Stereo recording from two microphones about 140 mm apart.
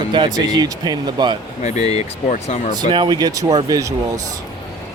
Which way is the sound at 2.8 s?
35° right (ahead or behind).